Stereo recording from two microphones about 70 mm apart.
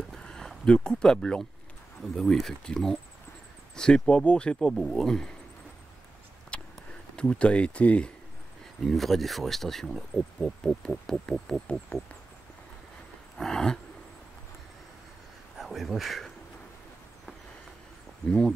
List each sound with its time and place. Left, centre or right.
0.1 s a sound: centre
2.0 s speech: centre
6.5 s a sound: centre
7.2 s speech: centre
8.8 s speech: centre
13.4 s wild animals: centre
15.5 s speech: centre